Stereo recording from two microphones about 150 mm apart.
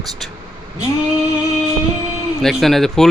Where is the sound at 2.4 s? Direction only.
Centre (ahead or behind).